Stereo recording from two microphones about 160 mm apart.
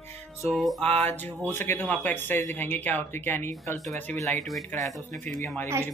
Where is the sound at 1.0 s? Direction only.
10° left (ahead or behind).